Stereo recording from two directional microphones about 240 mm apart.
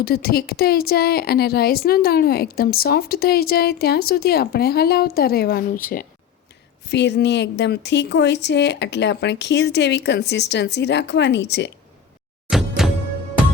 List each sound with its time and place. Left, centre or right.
0.0 s a woman's voice: left
12.5 s music: centre